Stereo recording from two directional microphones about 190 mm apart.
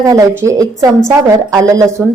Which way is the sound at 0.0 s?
15° right (ahead or behind).